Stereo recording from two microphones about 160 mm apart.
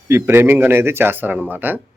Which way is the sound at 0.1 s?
15° right (ahead or behind).